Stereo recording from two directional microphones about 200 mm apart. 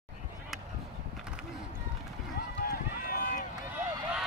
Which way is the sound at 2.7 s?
45° left (ahead or behind).